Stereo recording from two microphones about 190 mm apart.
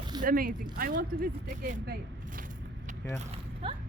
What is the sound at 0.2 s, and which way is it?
Speech, 50° right (ahead or behind).